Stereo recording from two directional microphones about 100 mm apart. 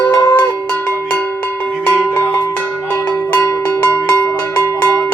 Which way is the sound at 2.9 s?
20° left (ahead or behind).